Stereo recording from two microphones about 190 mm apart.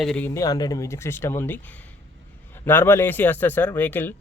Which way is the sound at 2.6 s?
10° left (ahead or behind).